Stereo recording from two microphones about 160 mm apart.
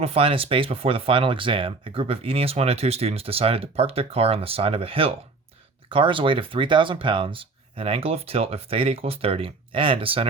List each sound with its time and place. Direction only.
0.0 s speech: 35° right (ahead or behind)